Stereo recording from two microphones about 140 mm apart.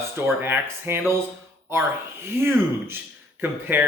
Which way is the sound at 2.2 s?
15° right (ahead or behind).